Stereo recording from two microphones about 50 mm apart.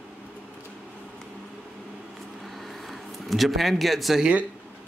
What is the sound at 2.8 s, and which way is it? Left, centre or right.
Speech, centre.